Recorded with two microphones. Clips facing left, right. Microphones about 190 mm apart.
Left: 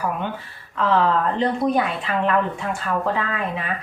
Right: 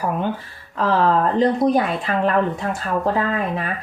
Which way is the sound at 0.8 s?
40° right (ahead or behind).